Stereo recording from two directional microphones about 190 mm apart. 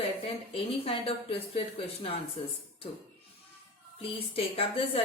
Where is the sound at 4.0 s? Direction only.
30° left (ahead or behind).